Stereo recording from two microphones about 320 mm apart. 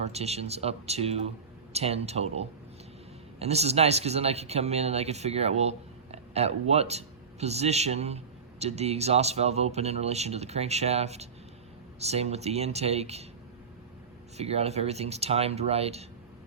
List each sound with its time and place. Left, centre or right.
0.0 s speech: centre
14.3 s speech: centre